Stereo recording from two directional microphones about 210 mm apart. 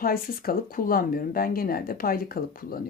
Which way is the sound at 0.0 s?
45° left (ahead or behind).